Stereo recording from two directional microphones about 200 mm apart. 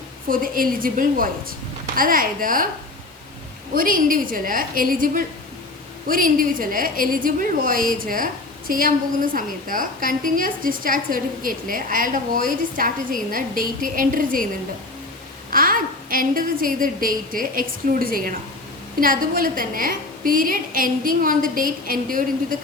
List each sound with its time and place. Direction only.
0.3 s a woman's voice: 45° right (ahead or behind)
3.8 s a woman's voice: 45° right (ahead or behind)
15.4 s a woman's voice: 45° right (ahead or behind)